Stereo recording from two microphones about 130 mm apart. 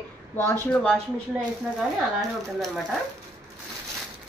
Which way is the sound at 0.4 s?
15° left (ahead or behind).